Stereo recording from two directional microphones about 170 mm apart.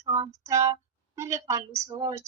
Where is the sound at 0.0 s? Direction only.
15° right (ahead or behind).